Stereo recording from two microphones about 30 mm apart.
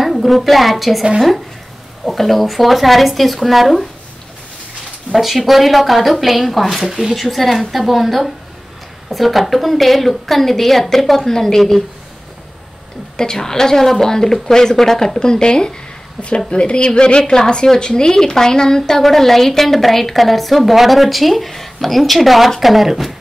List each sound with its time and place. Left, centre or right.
0.0 s a woman's voice: centre
2.0 s a woman's voice: centre
5.1 s a woman's voice: centre
13.2 s speech: centre
15.1 s a woman's voice: left; by 23.1 s centre